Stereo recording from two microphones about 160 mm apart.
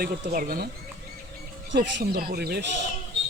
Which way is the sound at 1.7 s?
75° right (ahead or behind).